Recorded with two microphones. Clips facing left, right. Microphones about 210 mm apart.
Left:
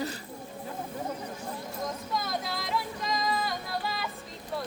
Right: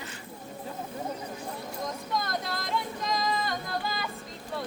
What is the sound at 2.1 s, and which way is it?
Female singing, centre (ahead or behind).